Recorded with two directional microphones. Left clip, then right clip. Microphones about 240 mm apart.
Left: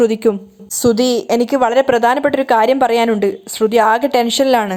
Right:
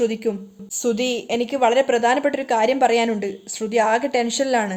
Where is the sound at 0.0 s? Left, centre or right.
Left.